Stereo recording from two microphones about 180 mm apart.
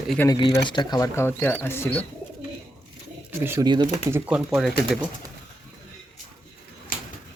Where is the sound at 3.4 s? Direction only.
15° right (ahead or behind).